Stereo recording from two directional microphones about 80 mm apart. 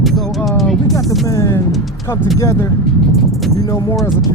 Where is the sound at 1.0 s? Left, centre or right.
Centre.